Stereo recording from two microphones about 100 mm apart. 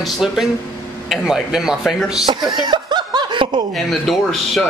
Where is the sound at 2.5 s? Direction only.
45° right (ahead or behind).